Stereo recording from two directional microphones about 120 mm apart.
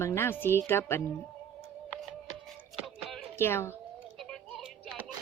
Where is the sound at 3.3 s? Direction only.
20° left (ahead or behind).